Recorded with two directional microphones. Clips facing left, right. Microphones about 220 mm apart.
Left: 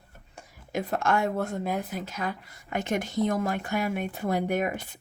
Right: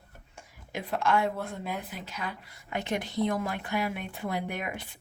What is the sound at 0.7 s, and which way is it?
Speech, 45° left (ahead or behind).